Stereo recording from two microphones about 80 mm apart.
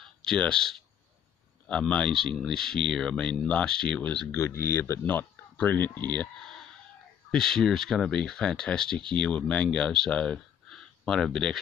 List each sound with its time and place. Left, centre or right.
0.0 s speech: centre
4.6 s speech: left
7.2 s speech: centre